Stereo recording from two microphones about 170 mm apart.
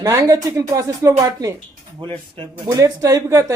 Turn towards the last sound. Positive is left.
turn(degrees=-15)  # may be behind; listen again after turning